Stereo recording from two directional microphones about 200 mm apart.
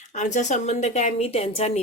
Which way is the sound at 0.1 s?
35° left (ahead or behind).